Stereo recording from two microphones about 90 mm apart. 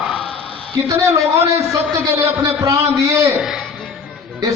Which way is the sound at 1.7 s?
35° right (ahead or behind).